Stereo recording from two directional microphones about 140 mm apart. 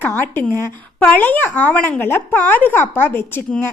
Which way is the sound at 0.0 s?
15° left (ahead or behind).